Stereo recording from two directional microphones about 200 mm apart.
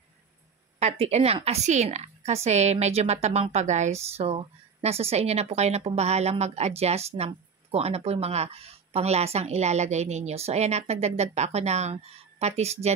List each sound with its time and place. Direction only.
0.7 s a woman's voice: 30° right (ahead or behind)